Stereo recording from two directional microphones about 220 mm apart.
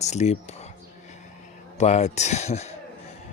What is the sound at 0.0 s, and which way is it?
Speech, 30° left (ahead or behind).